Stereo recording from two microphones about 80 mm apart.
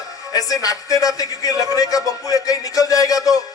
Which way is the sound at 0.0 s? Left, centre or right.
Left.